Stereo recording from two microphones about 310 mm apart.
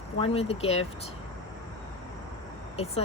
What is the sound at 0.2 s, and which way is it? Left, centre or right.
Speech, centre.